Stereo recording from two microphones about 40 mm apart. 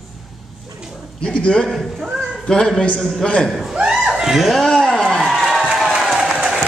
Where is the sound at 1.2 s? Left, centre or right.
Left.